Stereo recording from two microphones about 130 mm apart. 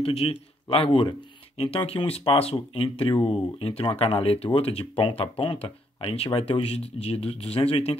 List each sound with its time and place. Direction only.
0.0 s speech: 50° left (ahead or behind)